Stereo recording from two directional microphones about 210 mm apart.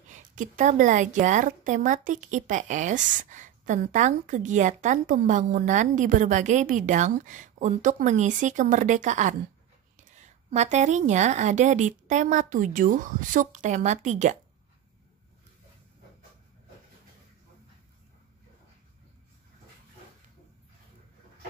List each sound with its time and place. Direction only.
0.1 s a woman's voice: 35° right (ahead or behind)